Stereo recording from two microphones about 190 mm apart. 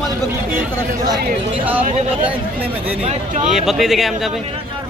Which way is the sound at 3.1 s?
40° right (ahead or behind).